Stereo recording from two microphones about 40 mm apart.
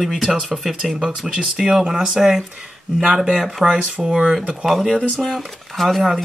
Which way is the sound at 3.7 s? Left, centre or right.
Right.